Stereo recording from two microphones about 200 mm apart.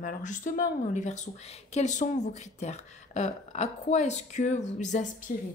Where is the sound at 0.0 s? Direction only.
40° left (ahead or behind).